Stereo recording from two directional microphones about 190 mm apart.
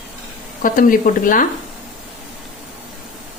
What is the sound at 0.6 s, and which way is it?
Speech, 45° left (ahead or behind).